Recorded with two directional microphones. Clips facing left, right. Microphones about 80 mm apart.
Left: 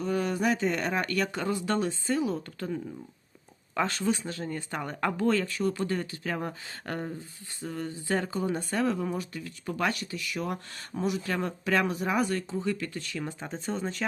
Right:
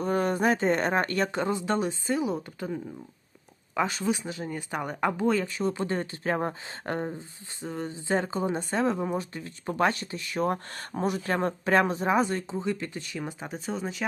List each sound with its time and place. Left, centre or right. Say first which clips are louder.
0.0 s speech: right 3 dB; right; by 14.0 s centre